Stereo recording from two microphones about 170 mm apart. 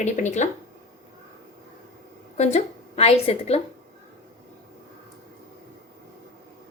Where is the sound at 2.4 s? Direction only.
40° left (ahead or behind).